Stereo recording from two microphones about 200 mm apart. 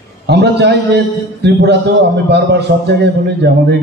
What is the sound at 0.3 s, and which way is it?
A man's voice, 60° right (ahead or behind).